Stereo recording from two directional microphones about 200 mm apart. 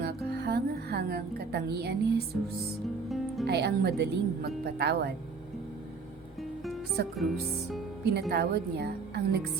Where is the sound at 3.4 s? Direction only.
55° right (ahead or behind).